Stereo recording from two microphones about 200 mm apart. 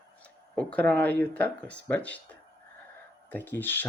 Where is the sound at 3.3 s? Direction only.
10° left (ahead or behind).